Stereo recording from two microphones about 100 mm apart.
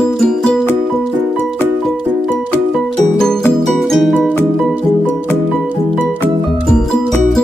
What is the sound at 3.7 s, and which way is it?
Music, centre (ahead or behind).